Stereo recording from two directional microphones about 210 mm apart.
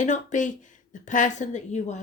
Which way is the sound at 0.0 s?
35° left (ahead or behind).